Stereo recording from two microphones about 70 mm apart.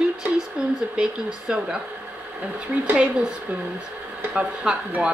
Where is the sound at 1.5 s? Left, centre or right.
Centre.